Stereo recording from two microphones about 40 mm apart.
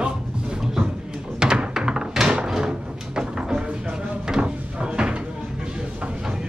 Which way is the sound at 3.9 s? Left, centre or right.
Centre.